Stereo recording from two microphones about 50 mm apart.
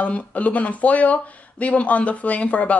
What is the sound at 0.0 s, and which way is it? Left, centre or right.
Speech, left.